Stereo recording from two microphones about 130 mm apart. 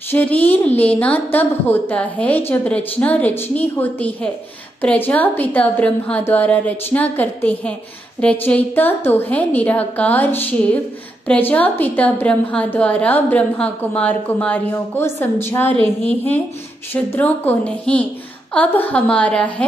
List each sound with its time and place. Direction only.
0.1 s a woman's voice: 10° left (ahead or behind)